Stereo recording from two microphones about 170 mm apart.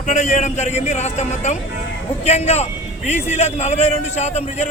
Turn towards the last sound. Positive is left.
turn(degrees=40)  # may be behind; listen again after turning